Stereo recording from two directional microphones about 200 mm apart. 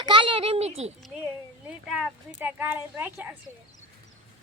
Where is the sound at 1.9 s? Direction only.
5° right (ahead or behind).